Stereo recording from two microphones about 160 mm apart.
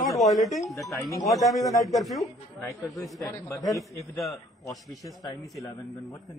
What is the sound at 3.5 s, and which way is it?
Speech, 20° left (ahead or behind).